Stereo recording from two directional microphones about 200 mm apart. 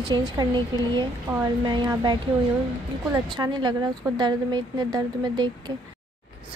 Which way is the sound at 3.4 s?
20° right (ahead or behind).